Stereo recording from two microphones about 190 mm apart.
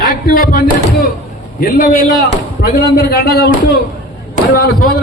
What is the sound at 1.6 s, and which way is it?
A man's voice, 45° left (ahead or behind).